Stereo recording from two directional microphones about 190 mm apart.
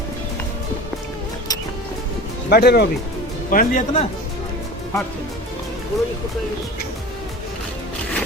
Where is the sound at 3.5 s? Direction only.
45° left (ahead or behind).